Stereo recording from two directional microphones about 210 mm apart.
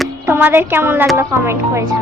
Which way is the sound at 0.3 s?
10° right (ahead or behind).